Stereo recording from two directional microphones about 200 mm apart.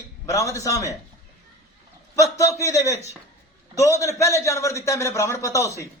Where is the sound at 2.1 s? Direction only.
15° left (ahead or behind).